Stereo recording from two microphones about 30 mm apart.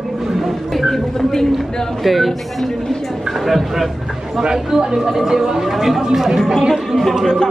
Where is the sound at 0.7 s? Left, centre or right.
Centre.